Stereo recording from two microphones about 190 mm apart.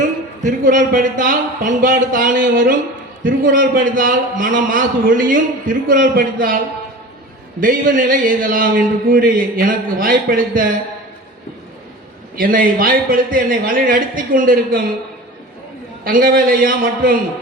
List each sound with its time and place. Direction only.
0.4 s a man's voice: 45° right (ahead or behind)
7.6 s a man's voice: 45° right (ahead or behind)
12.4 s a man's voice: 45° right (ahead or behind)
16.0 s a man's voice: 50° right (ahead or behind)